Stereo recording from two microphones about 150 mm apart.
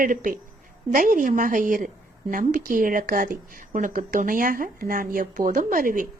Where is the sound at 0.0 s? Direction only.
65° right (ahead or behind).